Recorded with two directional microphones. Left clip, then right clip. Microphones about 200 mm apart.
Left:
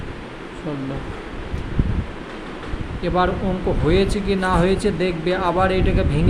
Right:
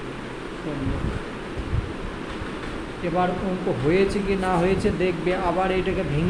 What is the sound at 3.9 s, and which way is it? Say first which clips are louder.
Speech: left 2 dB; 35° left (ahead or behind).